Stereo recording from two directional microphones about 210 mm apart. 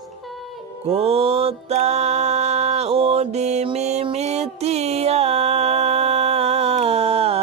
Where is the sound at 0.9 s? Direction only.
30° right (ahead or behind).